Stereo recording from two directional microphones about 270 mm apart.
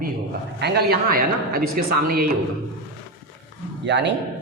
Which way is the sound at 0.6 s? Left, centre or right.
Right.